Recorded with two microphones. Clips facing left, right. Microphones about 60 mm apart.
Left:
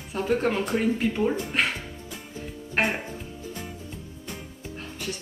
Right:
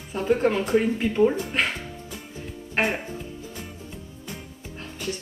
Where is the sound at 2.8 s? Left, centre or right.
Centre.